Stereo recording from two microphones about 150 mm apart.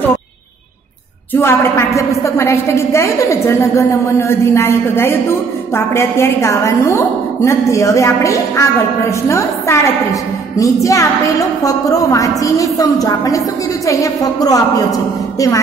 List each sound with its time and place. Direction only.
1.3 s a woman's voice: 15° left (ahead or behind)